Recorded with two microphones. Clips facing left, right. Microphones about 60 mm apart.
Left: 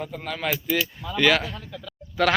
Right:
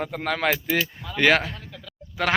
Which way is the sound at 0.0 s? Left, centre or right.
Right.